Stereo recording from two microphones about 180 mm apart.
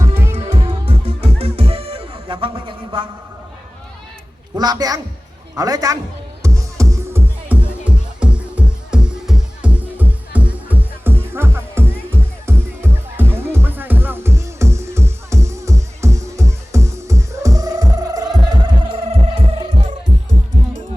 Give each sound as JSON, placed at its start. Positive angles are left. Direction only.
{"t": 0.0, "sound": "music", "side_deg": -15}
{"t": 0.5, "sound": "music", "side_deg": -35}
{"t": 4.5, "sound": "a man's voice", "side_deg": -20}
{"t": 6.4, "sound": "music", "side_deg": -15}